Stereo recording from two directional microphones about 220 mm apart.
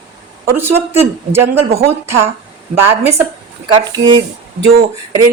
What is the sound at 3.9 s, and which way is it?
Speech, 20° right (ahead or behind).